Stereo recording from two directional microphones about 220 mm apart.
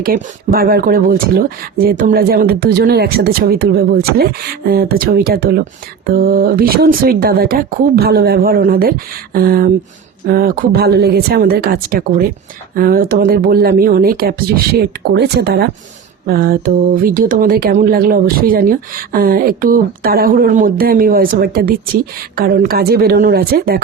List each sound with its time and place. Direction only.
0.0 s speech: 40° right (ahead or behind)